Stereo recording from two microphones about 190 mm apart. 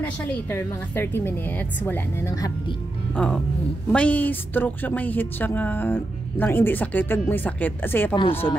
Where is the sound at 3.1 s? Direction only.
5° left (ahead or behind).